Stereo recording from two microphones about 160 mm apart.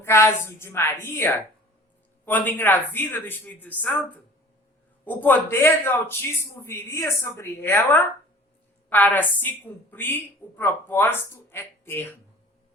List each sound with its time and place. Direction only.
0.0 s a woman's voice: 15° left (ahead or behind)